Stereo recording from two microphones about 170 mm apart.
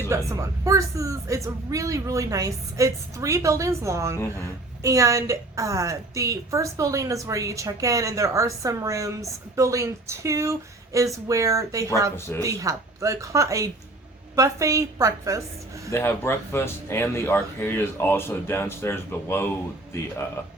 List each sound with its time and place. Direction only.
0.1 s a woman's voice: 20° right (ahead or behind)
15.9 s speech: 15° left (ahead or behind)